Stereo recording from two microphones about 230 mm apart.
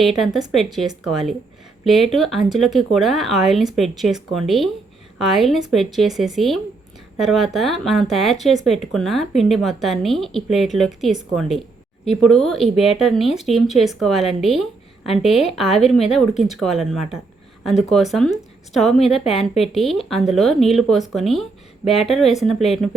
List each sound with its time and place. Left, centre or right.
0.0 s a woman's voice: centre